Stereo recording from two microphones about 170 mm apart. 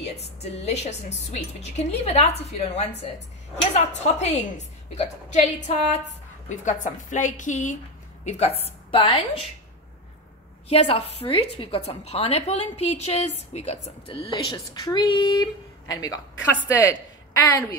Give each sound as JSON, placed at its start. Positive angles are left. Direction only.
{"t": 0.0, "sound": "a woman's voice", "side_deg": 40}
{"t": 10.7, "sound": "a woman's voice", "side_deg": 35}
{"t": 14.3, "sound": "speech", "side_deg": 25}
{"t": 17.4, "sound": "speech", "side_deg": 20}